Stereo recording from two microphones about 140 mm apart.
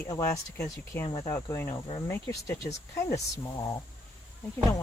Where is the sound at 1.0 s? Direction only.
45° left (ahead or behind).